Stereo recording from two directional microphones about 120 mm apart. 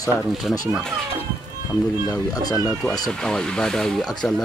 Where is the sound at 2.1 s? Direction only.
30° left (ahead or behind).